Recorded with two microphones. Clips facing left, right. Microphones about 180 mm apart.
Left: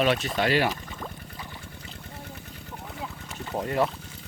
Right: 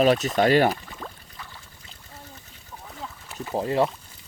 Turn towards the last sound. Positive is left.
turn(degrees=-30)  # may be behind; listen again after turning